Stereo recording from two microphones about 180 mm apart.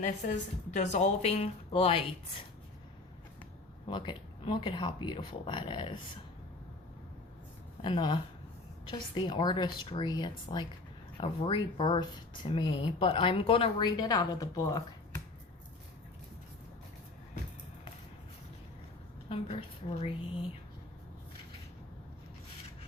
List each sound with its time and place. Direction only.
0.0 s a woman's voice: 40° left (ahead or behind)
3.8 s speech: 25° left (ahead or behind)
7.9 s speech: 25° left (ahead or behind)
19.3 s a woman's voice: 35° left (ahead or behind)